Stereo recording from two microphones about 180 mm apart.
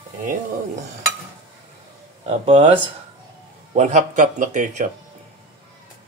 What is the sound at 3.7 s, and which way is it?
Speech, 40° right (ahead or behind).